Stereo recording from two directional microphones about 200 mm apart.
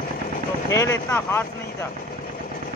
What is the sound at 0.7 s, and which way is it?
Speech, 15° left (ahead or behind).